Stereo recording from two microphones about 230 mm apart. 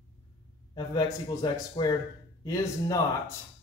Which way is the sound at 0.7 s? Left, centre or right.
Centre.